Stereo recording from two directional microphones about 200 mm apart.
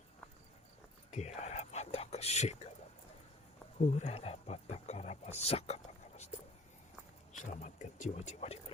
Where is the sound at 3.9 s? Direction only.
30° left (ahead or behind).